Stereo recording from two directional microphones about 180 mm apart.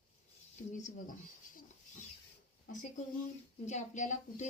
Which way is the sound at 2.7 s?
45° left (ahead or behind).